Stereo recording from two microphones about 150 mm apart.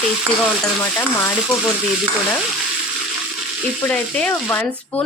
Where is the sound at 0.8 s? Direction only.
15° left (ahead or behind).